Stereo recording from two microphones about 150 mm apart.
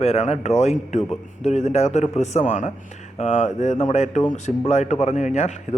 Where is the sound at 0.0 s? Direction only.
45° left (ahead or behind).